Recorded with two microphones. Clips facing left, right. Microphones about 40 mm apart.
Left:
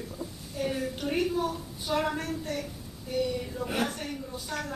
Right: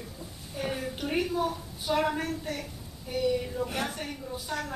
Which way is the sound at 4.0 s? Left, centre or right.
Centre.